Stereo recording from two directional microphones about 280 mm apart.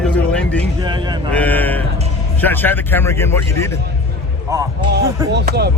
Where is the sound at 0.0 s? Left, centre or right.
Centre.